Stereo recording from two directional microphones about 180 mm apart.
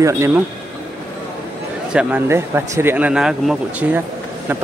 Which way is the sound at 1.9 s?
5° right (ahead or behind).